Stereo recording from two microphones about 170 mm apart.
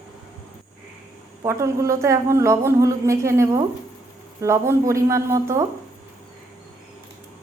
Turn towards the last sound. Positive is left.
turn(degrees=-15)  # may be behind; listen again after turning